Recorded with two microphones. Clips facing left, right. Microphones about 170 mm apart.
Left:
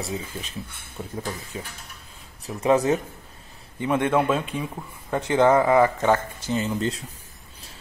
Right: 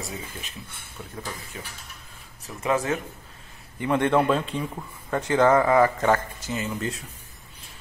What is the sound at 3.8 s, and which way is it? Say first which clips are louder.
Speech: even; 15° left (ahead or behind).